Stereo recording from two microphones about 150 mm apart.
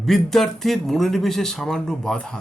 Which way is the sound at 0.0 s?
Centre (ahead or behind).